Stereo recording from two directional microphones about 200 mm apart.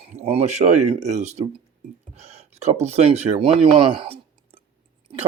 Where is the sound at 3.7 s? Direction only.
25° right (ahead or behind).